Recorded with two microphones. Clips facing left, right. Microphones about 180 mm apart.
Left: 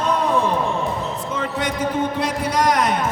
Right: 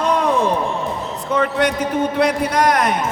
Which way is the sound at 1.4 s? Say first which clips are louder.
Right 8 dB; 70° right (ahead or behind).